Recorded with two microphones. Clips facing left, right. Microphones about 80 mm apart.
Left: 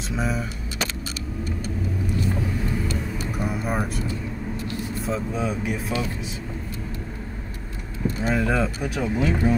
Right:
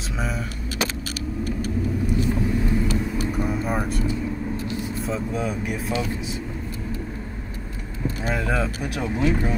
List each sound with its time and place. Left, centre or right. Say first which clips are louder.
3.3 s vehicle: left 1 dB; centre
4.9 s speech: left 1 dB; centre
8.3 s speech: left 2 dB; centre